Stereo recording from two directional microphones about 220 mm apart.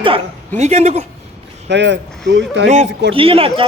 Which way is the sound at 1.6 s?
55° right (ahead or behind).